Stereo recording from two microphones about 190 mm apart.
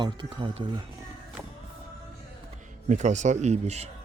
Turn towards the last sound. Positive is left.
turn(degrees=-35)  # may be behind; listen again after turning